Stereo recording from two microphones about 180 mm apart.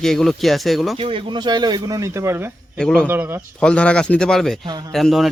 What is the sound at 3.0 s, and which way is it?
Speech, 10° right (ahead or behind).